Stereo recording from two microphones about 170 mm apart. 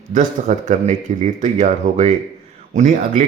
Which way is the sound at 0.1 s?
45° right (ahead or behind).